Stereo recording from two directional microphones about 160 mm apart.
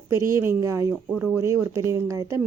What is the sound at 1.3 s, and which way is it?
A woman's voice, 20° right (ahead or behind).